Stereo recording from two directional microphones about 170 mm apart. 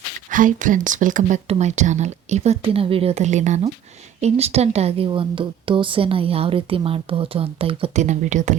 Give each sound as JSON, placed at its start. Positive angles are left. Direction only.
{"t": 0.3, "sound": "speech", "side_deg": -50}